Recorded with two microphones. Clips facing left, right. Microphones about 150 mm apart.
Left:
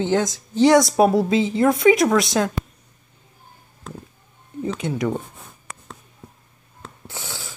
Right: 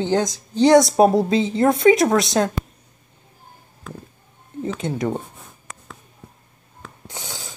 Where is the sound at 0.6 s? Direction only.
25° right (ahead or behind).